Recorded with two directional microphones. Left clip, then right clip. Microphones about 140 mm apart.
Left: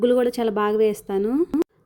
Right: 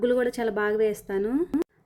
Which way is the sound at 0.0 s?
30° left (ahead or behind).